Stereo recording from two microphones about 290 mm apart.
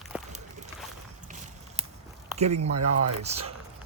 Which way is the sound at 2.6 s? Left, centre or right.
Right.